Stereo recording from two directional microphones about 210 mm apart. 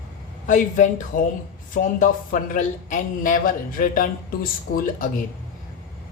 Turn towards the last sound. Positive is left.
turn(degrees=40)  # may be behind; listen again after turning